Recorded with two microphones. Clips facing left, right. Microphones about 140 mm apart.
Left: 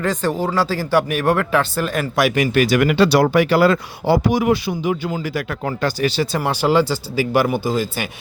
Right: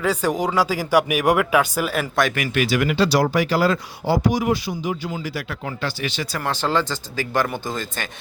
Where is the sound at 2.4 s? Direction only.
40° left (ahead or behind).